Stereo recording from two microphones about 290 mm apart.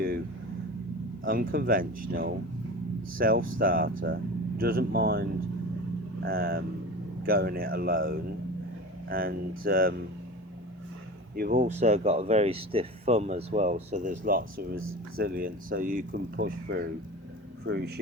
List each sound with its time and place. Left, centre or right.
1.2 s speech: right
6.2 s speech: right
11.3 s speech: right